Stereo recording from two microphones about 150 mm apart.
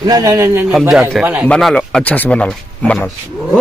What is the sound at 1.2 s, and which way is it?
Speech, 10° right (ahead or behind).